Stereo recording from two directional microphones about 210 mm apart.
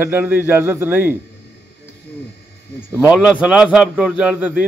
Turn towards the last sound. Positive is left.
turn(degrees=-5)  # may be behind; listen again after turning